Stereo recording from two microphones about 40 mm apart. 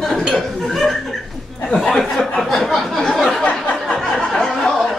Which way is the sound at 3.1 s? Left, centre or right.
Centre.